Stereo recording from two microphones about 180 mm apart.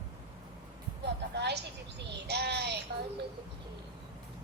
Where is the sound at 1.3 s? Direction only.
70° right (ahead or behind).